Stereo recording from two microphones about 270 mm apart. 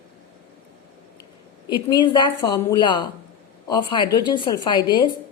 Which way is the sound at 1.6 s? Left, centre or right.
Centre.